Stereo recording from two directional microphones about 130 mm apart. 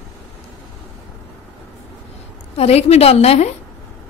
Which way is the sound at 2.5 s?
55° left (ahead or behind).